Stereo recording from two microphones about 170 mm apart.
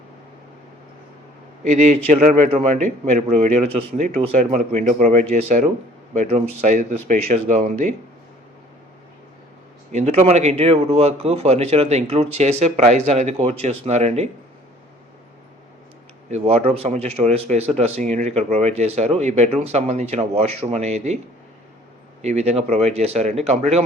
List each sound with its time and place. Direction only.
1.7 s a man's voice: 40° right (ahead or behind)
9.9 s speech: 40° right (ahead or behind)
16.3 s speech: 40° right (ahead or behind)
22.2 s speech: 40° right (ahead or behind)